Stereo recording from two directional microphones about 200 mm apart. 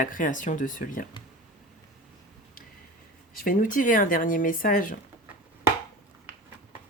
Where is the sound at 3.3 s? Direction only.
40° left (ahead or behind).